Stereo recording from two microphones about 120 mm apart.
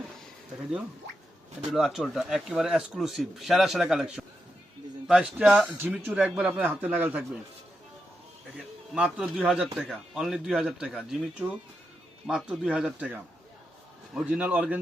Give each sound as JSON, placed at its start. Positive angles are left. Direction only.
{"t": 1.7, "sound": "a man's voice", "side_deg": -5}
{"t": 8.5, "sound": "a man's voice", "side_deg": -10}
{"t": 14.2, "sound": "speech", "side_deg": -10}